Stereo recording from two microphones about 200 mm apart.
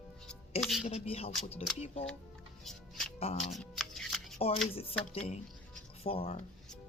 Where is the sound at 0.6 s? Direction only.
Centre (ahead or behind).